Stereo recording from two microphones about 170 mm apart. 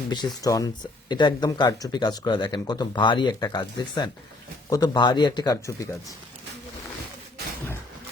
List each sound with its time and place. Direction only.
0.1 s speech: 25° left (ahead or behind)